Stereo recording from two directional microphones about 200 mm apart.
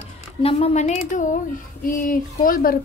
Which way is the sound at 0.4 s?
30° left (ahead or behind).